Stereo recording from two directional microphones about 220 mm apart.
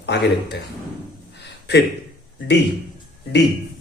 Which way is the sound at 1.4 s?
50° left (ahead or behind).